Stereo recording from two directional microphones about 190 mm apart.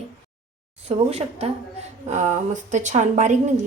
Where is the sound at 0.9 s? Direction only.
35° right (ahead or behind).